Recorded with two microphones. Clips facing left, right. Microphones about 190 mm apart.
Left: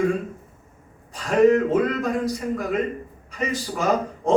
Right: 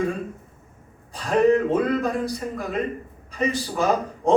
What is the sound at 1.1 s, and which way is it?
A man's voice, 35° right (ahead or behind).